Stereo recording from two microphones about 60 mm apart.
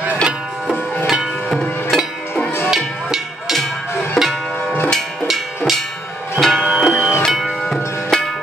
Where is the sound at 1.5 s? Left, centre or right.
Centre.